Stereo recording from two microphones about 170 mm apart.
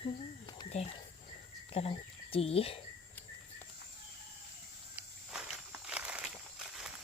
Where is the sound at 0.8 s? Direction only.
40° left (ahead or behind).